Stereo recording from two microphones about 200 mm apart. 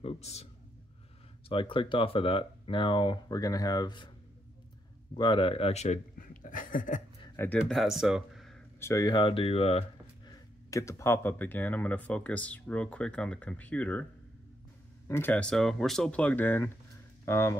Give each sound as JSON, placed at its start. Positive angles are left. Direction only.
{"t": 0.0, "sound": "a man's voice", "side_deg": 30}
{"t": 1.5, "sound": "speech", "side_deg": 25}
{"t": 5.1, "sound": "speech", "side_deg": 20}
{"t": 7.3, "sound": "speech", "side_deg": 5}
{"t": 8.7, "sound": "speech", "side_deg": 15}
{"t": 10.2, "sound": "speech", "side_deg": 15}
{"t": 15.0, "sound": "speech", "side_deg": 10}